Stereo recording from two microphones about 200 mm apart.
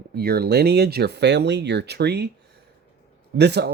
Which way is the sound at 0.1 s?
50° right (ahead or behind).